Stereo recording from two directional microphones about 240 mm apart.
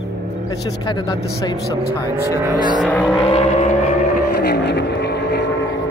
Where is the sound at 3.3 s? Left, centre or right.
Left.